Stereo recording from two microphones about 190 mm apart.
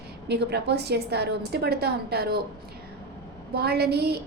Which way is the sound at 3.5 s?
55° right (ahead or behind).